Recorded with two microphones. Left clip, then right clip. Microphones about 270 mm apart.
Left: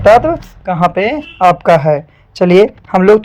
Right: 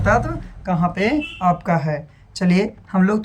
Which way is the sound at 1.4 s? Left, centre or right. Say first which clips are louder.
Left 14 dB; left.